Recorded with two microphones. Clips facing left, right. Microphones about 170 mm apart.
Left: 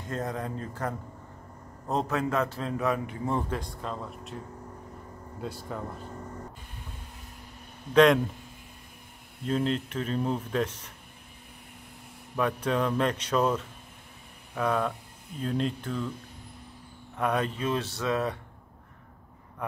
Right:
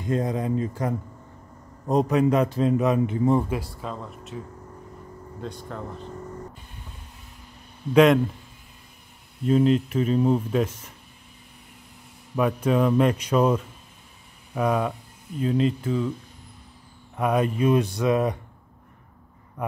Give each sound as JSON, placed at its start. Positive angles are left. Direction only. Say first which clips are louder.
{"t": 0.0, "sound": "a man's voice", "louder": "right 7 dB", "side_deg": -15}
{"t": 5.4, "sound": "speech", "louder": "right 1 dB", "side_deg": 5}
{"t": 7.9, "sound": "speech", "louder": "right 3 dB", "side_deg": -5}
{"t": 9.5, "sound": "a man's voice", "louder": "right 8 dB", "side_deg": -5}
{"t": 12.4, "sound": "a man's voice", "louder": "right 5 dB", "side_deg": -10}
{"t": 17.2, "sound": "a man's voice", "louder": "right 6 dB", "side_deg": -10}